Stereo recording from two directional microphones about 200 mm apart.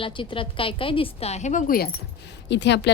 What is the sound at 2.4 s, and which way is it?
Speech, 60° left (ahead or behind).